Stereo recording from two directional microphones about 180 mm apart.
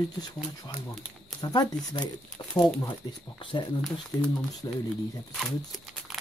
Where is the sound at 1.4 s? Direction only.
20° left (ahead or behind).